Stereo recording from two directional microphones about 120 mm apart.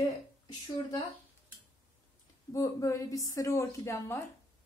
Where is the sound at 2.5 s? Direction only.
25° left (ahead or behind).